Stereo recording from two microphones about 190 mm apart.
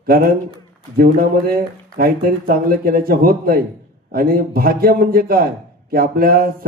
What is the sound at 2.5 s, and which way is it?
Speech, 50° right (ahead or behind).